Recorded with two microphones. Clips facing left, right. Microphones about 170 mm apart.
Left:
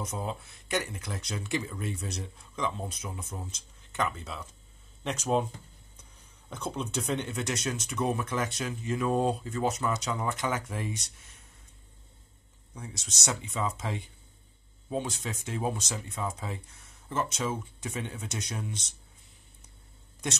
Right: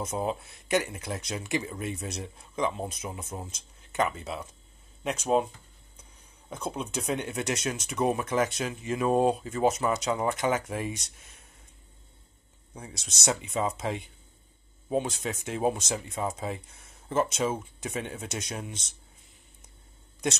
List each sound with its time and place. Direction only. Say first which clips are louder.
0.0 s speech: right 5 dB; 20° right (ahead or behind)
5.0 s speech: right 2 dB; 5° right (ahead or behind)
6.5 s speech: right 1 dB; 10° right (ahead or behind)
13.0 s speech: right 5 dB; 15° right (ahead or behind)
15.4 s speech: right 5 dB; 20° right (ahead or behind)